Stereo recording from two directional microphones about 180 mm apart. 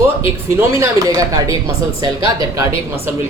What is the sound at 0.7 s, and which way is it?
Speech, 15° right (ahead or behind).